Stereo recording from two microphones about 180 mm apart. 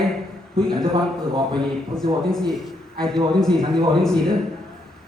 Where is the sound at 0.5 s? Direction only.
5° left (ahead or behind).